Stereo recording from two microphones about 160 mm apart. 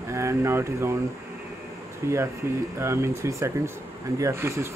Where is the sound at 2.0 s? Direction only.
15° right (ahead or behind).